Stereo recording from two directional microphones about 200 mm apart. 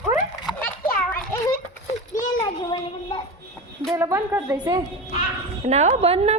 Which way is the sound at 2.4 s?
20° left (ahead or behind).